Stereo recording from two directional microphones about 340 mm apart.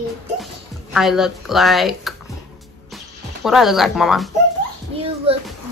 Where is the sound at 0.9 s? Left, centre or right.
Centre.